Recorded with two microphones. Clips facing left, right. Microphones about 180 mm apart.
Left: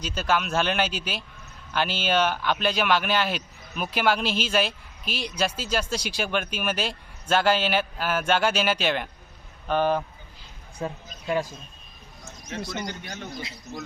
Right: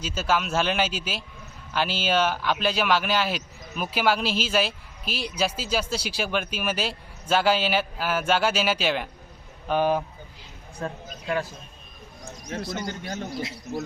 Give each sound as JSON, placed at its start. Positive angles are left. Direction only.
{"t": 0.0, "sound": "speech", "side_deg": -5}
{"t": 10.8, "sound": "a man's voice", "side_deg": 15}
{"t": 12.2, "sound": "bird", "side_deg": -30}
{"t": 13.1, "sound": "a man's voice", "side_deg": -40}